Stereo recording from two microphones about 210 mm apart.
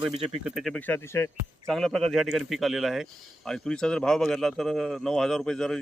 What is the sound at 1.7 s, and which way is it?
A man's voice, centre (ahead or behind).